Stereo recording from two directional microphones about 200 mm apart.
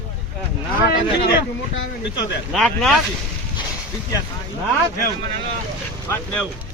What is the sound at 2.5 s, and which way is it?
Speech, centre (ahead or behind).